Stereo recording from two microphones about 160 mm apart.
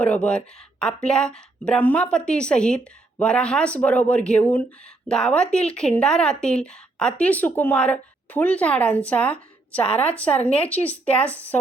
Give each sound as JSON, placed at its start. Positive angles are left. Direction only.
{"t": 0.0, "sound": "speech", "side_deg": 10}